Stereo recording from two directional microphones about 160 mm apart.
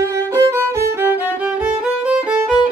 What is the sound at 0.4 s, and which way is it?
Music, 15° right (ahead or behind).